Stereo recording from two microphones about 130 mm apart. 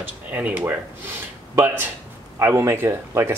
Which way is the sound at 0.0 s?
10° right (ahead or behind).